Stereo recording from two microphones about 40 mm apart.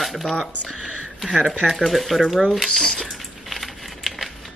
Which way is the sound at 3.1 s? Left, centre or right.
Centre.